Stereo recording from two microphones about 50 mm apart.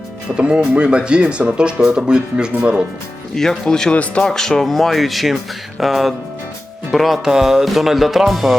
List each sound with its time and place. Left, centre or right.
0.3 s speech: right
3.3 s speech: centre
3.9 s speech: left
4.3 s speech: centre
7.3 s speech: centre